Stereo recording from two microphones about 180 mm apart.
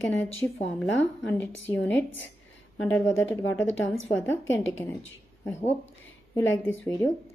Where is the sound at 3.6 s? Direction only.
90° left.